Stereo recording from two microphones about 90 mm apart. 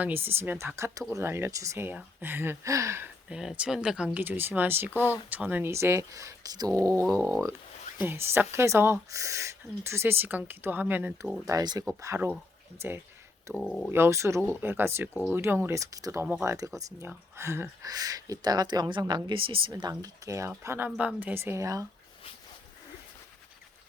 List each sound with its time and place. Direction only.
0.0 s speech: 25° right (ahead or behind)
1.9 s speech: 20° right (ahead or behind)
2.6 s speech: 35° right (ahead or behind)
3.2 s speech: 10° right (ahead or behind)
11.6 s speech: 50° right (ahead or behind)
12.8 s speech: 30° right (ahead or behind)
13.5 s speech: 5° left (ahead or behind)
13.9 s speech: 30° right (ahead or behind)
15.7 s speech: 40° right (ahead or behind)
16.2 s speech: 25° right (ahead or behind)
17.1 s speech: 30° right (ahead or behind)
17.8 s speech: 45° right (ahead or behind); by 19.7 s 80° right
19.9 s speech: 35° right (ahead or behind)
20.7 s speech: 20° right (ahead or behind); by 21.8 s 40° right (ahead or behind)